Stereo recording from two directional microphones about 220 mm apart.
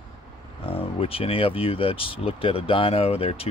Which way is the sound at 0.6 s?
25° left (ahead or behind).